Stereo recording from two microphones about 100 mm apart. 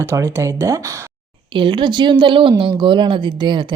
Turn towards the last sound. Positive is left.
turn(degrees=-50)  # may be behind; listen again after turning